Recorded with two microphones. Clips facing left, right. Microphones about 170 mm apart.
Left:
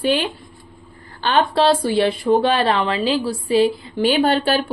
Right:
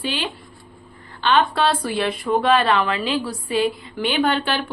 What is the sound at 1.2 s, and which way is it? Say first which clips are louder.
Speech: left 2 dB; 35° left (ahead or behind).